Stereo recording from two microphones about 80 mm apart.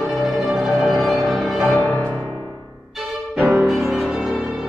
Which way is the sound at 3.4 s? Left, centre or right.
Right.